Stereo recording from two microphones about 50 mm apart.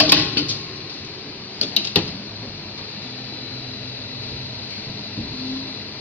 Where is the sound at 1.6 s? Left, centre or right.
Left.